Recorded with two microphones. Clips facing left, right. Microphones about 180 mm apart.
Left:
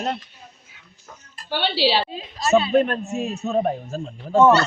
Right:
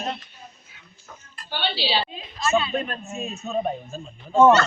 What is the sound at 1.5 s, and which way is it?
Speech, 90° left.